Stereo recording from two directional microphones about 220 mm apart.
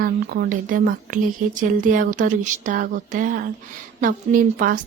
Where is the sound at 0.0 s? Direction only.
40° right (ahead or behind).